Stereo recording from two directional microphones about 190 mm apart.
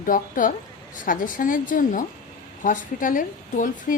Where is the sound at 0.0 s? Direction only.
45° left (ahead or behind).